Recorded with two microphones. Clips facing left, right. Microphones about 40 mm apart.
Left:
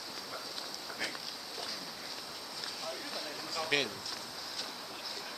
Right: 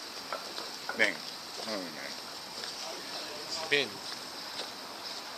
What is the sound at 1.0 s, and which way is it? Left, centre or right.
Speech, right.